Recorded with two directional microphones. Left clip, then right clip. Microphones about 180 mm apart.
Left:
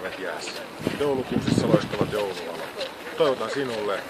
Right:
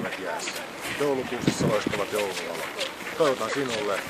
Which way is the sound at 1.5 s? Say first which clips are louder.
Left 2 dB; 45° left (ahead or behind).